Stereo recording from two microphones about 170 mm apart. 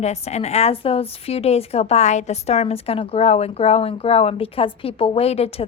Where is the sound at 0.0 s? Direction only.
40° left (ahead or behind).